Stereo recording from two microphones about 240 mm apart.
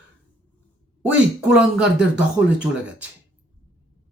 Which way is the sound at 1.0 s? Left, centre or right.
Centre.